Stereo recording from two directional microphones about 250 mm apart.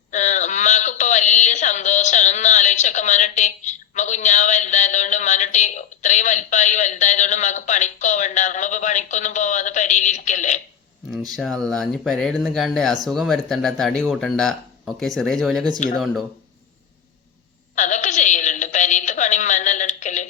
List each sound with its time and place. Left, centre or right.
0.1 s speech: left
11.3 s speech: centre
15.8 s speech: left
17.7 s a sound: left